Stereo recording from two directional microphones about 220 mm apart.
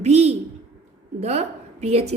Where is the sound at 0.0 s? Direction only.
30° right (ahead or behind).